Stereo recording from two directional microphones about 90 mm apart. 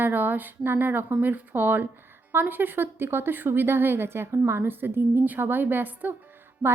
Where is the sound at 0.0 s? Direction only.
20° right (ahead or behind).